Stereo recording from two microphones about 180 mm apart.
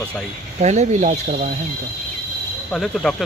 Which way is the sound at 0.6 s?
40° right (ahead or behind).